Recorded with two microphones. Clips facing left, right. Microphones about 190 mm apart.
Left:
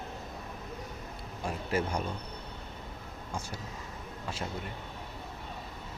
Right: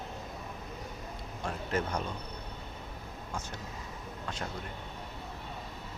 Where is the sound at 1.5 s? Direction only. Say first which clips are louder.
Left 1 dB; 10° left (ahead or behind).